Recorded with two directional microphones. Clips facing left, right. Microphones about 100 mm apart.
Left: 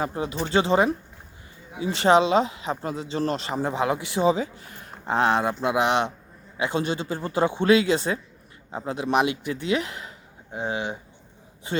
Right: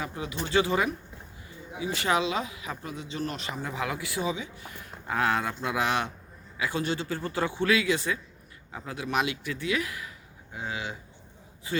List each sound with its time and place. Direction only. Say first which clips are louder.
0.0 s speech: left 6 dB; 35° left (ahead or behind)
5.1 s speech: left 5 dB; 25° left (ahead or behind)